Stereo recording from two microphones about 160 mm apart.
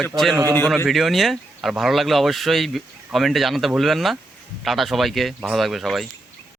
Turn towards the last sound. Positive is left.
turn(degrees=0)  # may be behind; listen again after turning